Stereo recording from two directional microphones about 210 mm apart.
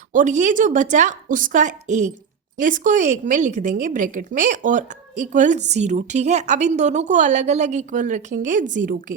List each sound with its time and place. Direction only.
0.1 s a woman's voice: 35° right (ahead or behind)